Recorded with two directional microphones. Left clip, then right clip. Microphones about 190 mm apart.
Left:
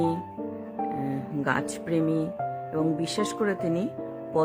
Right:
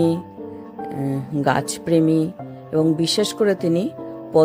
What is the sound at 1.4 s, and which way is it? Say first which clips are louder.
Speech: right 8 dB; 25° right (ahead or behind).